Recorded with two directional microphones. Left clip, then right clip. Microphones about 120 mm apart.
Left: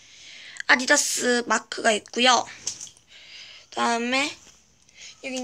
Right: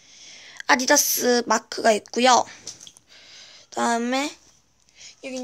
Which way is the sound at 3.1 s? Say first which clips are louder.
Left 2 dB; 60° right (ahead or behind).